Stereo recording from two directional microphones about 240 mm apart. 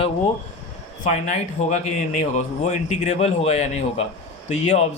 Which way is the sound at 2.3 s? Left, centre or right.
Left.